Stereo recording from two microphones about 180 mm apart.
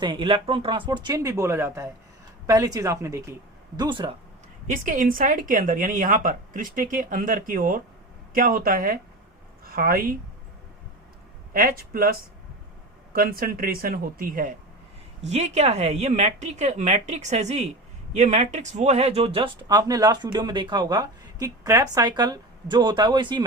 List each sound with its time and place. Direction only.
0.0 s speech: 25° right (ahead or behind)
3.8 s speech: 25° right (ahead or behind)
4.6 s speech: 50° right (ahead or behind)
11.5 s speech: 55° right (ahead or behind)
13.1 s speech: 55° right (ahead or behind)
15.2 s a woman's voice: 40° right (ahead or behind)